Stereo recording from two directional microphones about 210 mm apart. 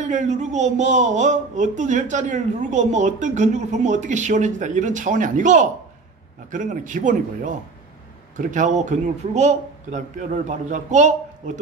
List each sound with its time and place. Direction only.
0.0 s speech: 35° right (ahead or behind)